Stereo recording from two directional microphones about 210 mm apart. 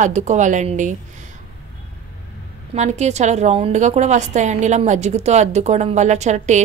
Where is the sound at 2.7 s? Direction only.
30° right (ahead or behind).